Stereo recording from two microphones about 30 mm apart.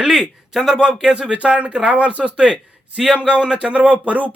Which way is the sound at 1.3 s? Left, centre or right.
Right.